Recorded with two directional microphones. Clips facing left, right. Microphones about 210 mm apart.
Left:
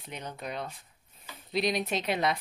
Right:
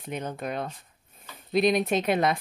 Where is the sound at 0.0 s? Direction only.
50° right (ahead or behind).